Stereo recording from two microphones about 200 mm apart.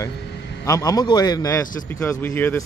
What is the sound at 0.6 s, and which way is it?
A man's voice, 15° left (ahead or behind).